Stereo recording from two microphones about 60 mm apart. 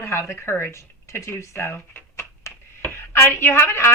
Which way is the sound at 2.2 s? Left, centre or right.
Left.